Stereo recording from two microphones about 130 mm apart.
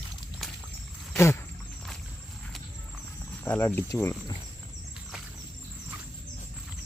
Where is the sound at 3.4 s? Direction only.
15° left (ahead or behind).